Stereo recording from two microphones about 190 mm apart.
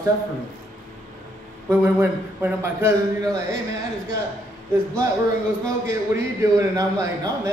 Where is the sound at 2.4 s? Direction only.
15° right (ahead or behind).